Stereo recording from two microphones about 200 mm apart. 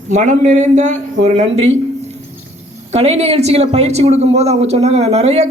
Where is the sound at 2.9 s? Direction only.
30° right (ahead or behind).